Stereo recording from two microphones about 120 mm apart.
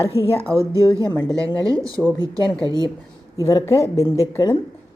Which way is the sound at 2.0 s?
15° right (ahead or behind).